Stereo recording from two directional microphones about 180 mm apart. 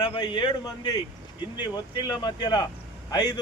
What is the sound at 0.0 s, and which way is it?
Speech, 25° left (ahead or behind).